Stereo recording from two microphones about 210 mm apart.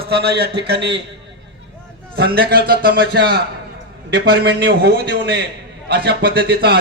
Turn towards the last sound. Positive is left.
turn(degrees=-50)  # may be behind; listen again after turning